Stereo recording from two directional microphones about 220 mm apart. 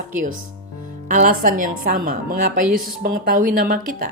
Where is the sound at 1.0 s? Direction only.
35° right (ahead or behind).